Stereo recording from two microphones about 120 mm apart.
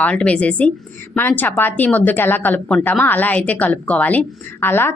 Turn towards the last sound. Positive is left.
turn(degrees=20)  # may be behind; listen again after turning